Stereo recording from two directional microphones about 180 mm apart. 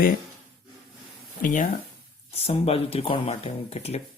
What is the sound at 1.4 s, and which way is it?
Speech, 45° left (ahead or behind).